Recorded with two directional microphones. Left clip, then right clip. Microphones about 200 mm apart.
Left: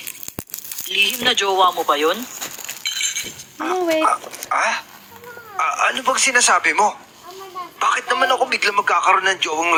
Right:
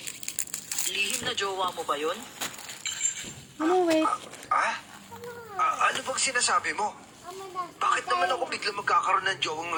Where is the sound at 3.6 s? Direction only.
50° left (ahead or behind).